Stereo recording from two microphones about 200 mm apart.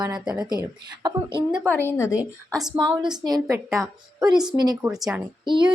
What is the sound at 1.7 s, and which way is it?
Speech, 10° left (ahead or behind).